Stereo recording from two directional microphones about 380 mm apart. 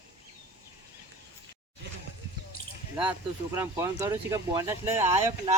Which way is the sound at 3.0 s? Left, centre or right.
Centre.